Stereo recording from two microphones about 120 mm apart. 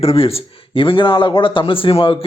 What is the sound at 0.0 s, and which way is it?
Speech, 55° left (ahead or behind).